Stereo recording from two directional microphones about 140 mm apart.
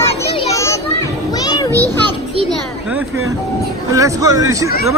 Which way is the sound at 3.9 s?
25° right (ahead or behind).